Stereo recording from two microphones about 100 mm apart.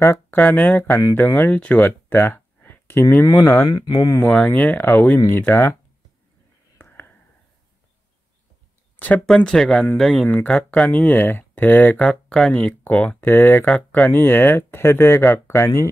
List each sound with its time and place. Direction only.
0.0 s speech: 20° left (ahead or behind)
3.6 s speech: 45° left (ahead or behind)
4.2 s speech: 15° left (ahead or behind)
6.8 s whispering: 20° left (ahead or behind)
9.2 s speech: 5° left (ahead or behind)
10.2 s speech: 15° left (ahead or behind)